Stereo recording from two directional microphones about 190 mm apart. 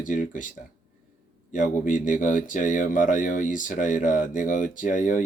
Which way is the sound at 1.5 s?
40° left (ahead or behind).